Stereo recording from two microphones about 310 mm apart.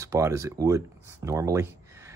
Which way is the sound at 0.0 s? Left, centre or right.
Centre.